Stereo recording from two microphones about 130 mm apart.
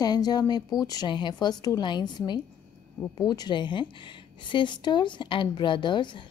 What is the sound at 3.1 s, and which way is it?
A woman's voice, 30° left (ahead or behind).